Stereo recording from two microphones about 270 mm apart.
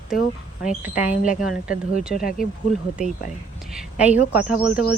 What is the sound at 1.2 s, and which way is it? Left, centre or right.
Speech, left.